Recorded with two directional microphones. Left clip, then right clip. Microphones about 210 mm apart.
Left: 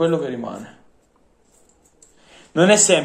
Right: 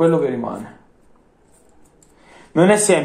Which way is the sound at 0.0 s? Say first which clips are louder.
Right 4 dB; 20° left (ahead or behind).